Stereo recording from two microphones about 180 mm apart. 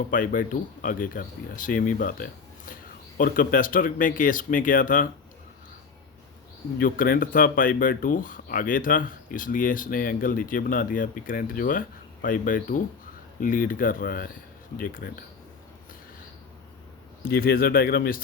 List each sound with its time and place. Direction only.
0.1 s speech: 50° left (ahead or behind)
6.7 s speech: 50° left (ahead or behind)
17.2 s speech: 55° left (ahead or behind)